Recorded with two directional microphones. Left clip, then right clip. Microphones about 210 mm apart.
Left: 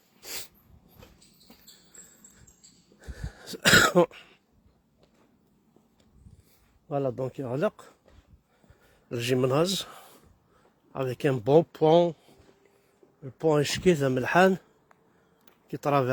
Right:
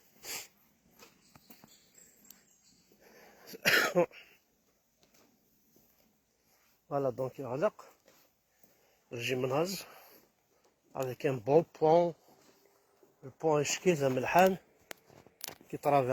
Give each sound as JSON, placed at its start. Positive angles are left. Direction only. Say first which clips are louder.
{"t": 0.2, "sound": "dog", "louder": "left 3 dB", "side_deg": 35}
{"t": 0.9, "sound": "a sound", "louder": "left 3 dB", "side_deg": -45}
{"t": 3.0, "sound": "throat clearing", "louder": "left 9 dB", "side_deg": 40}
{"t": 6.8, "sound": "speech", "louder": "left 3 dB", "side_deg": 25}
{"t": 9.0, "sound": "speech", "louder": "left 7 dB", "side_deg": 40}
{"t": 13.4, "sound": "speech", "louder": "left 5 dB", "side_deg": 35}
{"t": 15.7, "sound": "speech", "louder": "left 3 dB", "side_deg": 25}